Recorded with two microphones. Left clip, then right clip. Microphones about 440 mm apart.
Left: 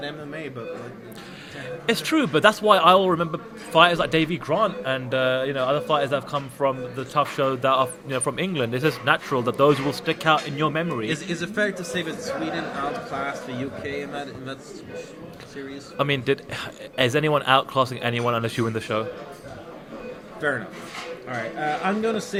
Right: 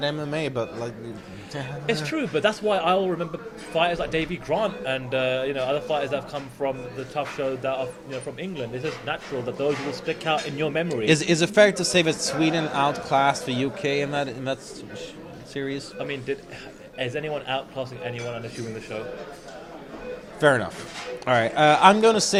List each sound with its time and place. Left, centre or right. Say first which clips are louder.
0.0 s speech: right 6 dB; right
1.9 s speech: left 4 dB; left
10.8 s speech: right 6 dB; centre
16.0 s speech: left 11 dB; left
21.2 s speech: right 10 dB; right